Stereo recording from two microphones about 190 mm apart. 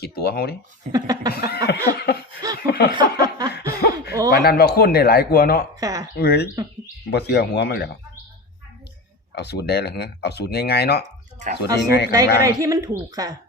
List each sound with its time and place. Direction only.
0.0 s speech: 55° left (ahead or behind)
0.9 s laughter: 20° right (ahead or behind)
1.3 s speech: 55° left (ahead or behind)
2.6 s a sound: 55° left (ahead or behind)
2.9 s a sound: 20° right (ahead or behind)
3.7 s a sound: 55° left (ahead or behind)
4.3 s speech: 55° left (ahead or behind)
5.8 s laughter: 20° right (ahead or behind)
6.1 s speech: 55° left (ahead or behind)
9.3 s speech: 60° left (ahead or behind)
12.1 s speech: 15° right (ahead or behind)